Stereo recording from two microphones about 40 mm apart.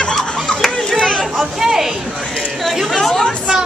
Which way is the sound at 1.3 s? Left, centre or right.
Centre.